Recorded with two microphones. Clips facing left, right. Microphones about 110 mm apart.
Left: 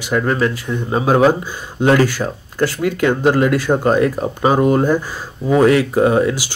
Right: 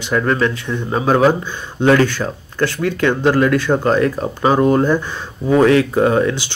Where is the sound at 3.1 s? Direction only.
10° left (ahead or behind).